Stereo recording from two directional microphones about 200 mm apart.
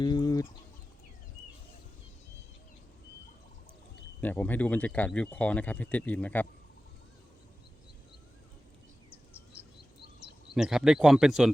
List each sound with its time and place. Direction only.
0.0 s chicken: 20° left (ahead or behind)
4.2 s speech: 10° left (ahead or behind)
10.5 s speech: centre (ahead or behind)